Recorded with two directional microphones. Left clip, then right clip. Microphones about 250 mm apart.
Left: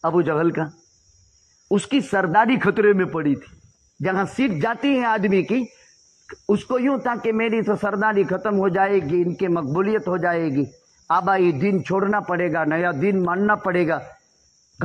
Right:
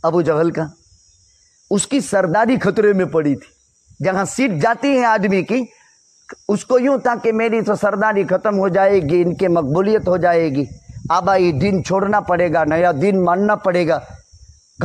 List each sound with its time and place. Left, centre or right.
0.0 s a man's voice: right
1.7 s a man's voice: right